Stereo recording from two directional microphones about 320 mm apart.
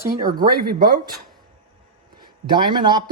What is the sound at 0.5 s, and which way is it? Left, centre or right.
Speech, right.